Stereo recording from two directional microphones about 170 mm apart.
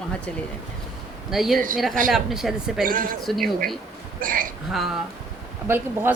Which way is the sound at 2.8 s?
55° right (ahead or behind).